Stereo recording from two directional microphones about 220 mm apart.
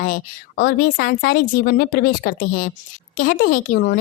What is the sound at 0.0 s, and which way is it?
A woman's voice, 45° left (ahead or behind).